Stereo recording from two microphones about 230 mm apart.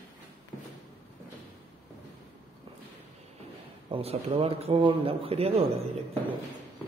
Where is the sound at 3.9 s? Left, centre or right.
Right.